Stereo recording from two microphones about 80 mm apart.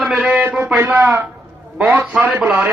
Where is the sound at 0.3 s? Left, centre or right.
Centre.